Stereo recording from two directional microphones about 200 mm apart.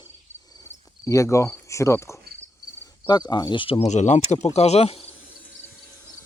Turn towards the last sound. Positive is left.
turn(degrees=30)  # may be behind; listen again after turning